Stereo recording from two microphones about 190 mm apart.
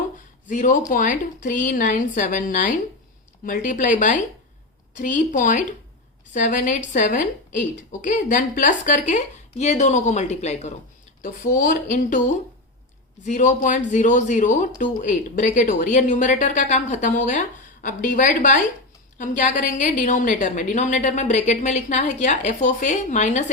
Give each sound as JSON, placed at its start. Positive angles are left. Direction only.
{"t": 0.4, "sound": "a woman's voice", "side_deg": 40}